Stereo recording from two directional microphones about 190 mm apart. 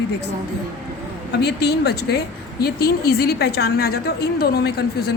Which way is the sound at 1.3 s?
60° left (ahead or behind).